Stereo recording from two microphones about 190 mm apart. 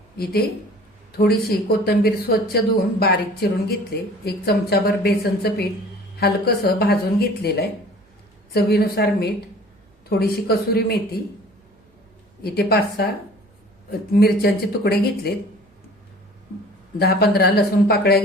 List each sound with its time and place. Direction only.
1.2 s a woman's voice: 55° left (ahead or behind)
12.4 s a woman's voice: 55° left (ahead or behind)
14.1 s a woman's voice: 55° left (ahead or behind)
17.0 s a woman's voice: 55° left (ahead or behind)